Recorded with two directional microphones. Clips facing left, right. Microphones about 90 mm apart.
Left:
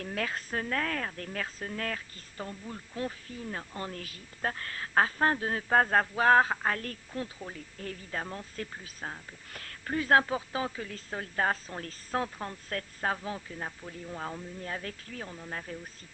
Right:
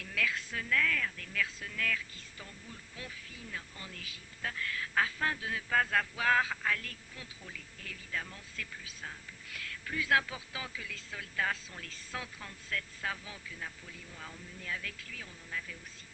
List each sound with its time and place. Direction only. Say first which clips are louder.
0.0 s speech: left 2 dB; 40° left (ahead or behind)